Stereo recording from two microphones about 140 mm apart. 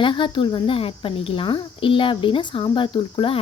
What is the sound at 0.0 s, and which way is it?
Speech, 35° left (ahead or behind).